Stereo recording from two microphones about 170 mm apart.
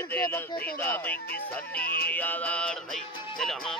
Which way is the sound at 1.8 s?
60° left (ahead or behind).